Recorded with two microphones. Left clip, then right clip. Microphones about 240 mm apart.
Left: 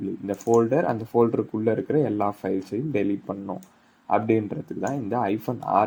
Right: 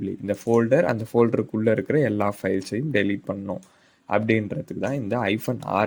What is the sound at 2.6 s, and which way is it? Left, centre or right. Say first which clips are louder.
Speech: right 2 dB; right.